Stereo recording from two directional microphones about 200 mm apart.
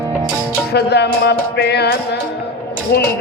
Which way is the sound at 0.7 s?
55° left (ahead or behind).